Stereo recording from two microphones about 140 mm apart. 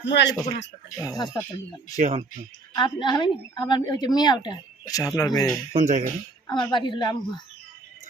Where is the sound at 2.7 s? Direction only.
30° left (ahead or behind).